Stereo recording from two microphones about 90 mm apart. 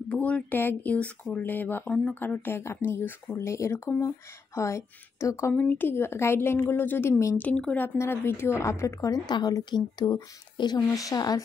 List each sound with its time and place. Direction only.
0.1 s a woman's voice: 15° left (ahead or behind); by 5.5 s 35° left (ahead or behind)
5.5 s speech: 20° left (ahead or behind)
7.3 s speech: 15° left (ahead or behind)
7.8 s a woman's voice: 25° left (ahead or behind); by 10.8 s 55° left (ahead or behind)
10.9 s a woman's voice: 40° left (ahead or behind)